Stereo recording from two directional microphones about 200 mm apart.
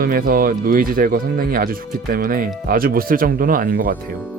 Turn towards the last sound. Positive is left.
turn(degrees=-45)  # may be behind; listen again after turning